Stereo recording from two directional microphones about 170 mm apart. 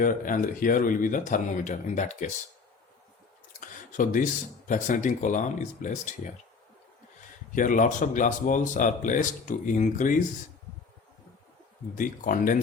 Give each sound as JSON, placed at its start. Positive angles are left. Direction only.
{"t": 0.0, "sound": "speech", "side_deg": 55}
{"t": 3.9, "sound": "speech", "side_deg": 50}
{"t": 7.5, "sound": "speech", "side_deg": 50}
{"t": 11.9, "sound": "speech", "side_deg": 50}